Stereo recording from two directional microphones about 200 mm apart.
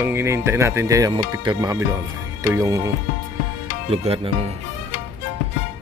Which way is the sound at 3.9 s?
30° right (ahead or behind).